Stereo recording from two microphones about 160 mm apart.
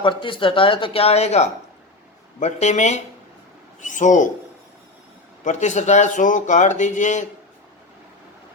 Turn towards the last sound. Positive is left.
turn(degrees=50)  # may be behind; listen again after turning